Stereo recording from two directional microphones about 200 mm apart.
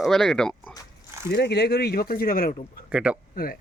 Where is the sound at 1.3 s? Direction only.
55° left (ahead or behind).